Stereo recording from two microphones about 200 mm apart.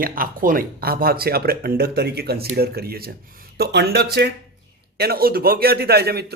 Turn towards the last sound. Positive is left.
turn(degrees=-50)  # may be behind; listen again after turning